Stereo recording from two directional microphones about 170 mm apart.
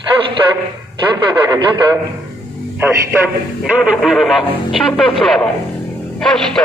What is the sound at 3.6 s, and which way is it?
Speech, 5° right (ahead or behind).